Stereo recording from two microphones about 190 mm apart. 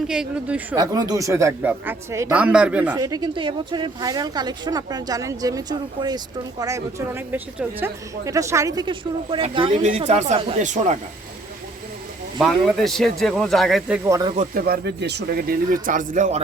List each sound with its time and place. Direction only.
0.1 s speech: 5° right (ahead or behind)
0.8 s speech: 20° right (ahead or behind)
2.9 s speech: 20° right (ahead or behind); by 10.9 s 40° right (ahead or behind)
12.4 s speech: centre (ahead or behind)
14.1 s speech: 20° right (ahead or behind)
14.3 s speech: 50° right (ahead or behind)